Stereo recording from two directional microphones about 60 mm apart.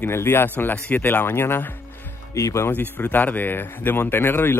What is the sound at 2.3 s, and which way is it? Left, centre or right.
Speech, left.